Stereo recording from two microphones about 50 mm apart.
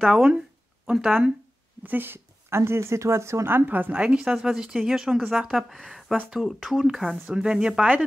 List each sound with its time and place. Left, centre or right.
0.1 s speech: centre
0.9 s speech: centre
1.8 s speech: right
3.4 s a woman's voice: right
4.0 s speech: right
4.3 s speech: centre
7.2 s speech: centre